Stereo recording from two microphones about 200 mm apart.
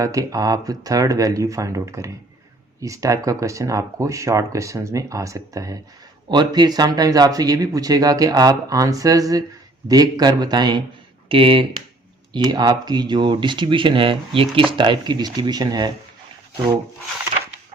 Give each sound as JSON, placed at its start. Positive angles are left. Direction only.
{"t": 0.0, "sound": "speech", "side_deg": -15}